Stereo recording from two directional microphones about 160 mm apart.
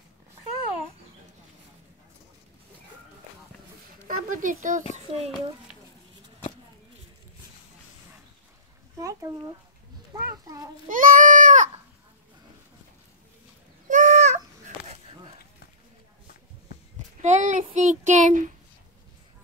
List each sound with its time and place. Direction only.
4.1 s speech: 55° right (ahead or behind)
4.9 s a child's voice: 40° right (ahead or behind)
8.9 s a sound: 20° right (ahead or behind)
10.9 s goat: 60° right (ahead or behind)
13.8 s a sound: 50° right (ahead or behind)
17.2 s child singing: 50° right (ahead or behind)